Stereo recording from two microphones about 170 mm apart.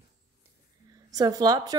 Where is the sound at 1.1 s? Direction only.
20° right (ahead or behind).